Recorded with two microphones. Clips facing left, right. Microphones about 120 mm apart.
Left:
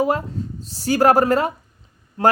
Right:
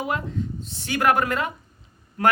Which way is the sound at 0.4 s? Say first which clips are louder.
Even; 40° left (ahead or behind).